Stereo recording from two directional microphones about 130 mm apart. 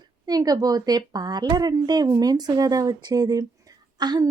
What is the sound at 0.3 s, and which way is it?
Speech, 30° right (ahead or behind).